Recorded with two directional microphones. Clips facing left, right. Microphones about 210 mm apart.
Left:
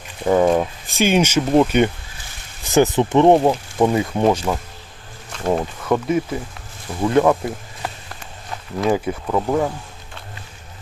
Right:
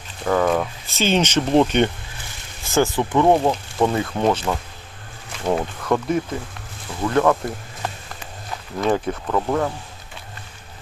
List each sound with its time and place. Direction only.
0.3 s speech: 20° left (ahead or behind)
2.6 s speech: 20° left (ahead or behind)
7.1 s speech: 15° left (ahead or behind)